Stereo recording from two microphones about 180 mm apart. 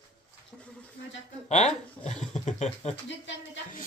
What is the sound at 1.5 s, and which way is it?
Speech, 40° left (ahead or behind).